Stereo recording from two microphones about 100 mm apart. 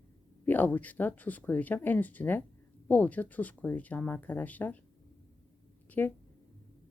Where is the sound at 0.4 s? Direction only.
20° left (ahead or behind).